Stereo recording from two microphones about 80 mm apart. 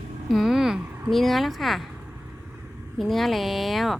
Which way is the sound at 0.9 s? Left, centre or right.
Right.